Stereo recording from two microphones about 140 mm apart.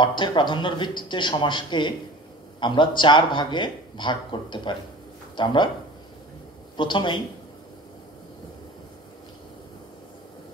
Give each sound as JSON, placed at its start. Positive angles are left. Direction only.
{"t": 0.0, "sound": "speech", "side_deg": 35}
{"t": 6.8, "sound": "speech", "side_deg": 35}